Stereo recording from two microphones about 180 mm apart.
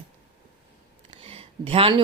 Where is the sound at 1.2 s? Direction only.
30° right (ahead or behind).